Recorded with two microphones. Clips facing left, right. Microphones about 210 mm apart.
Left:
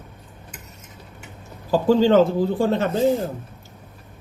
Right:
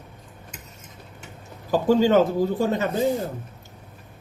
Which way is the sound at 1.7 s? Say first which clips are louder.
Left 2 dB; 15° right (ahead or behind).